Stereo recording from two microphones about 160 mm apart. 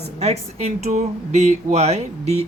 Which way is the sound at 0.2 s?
40° right (ahead or behind).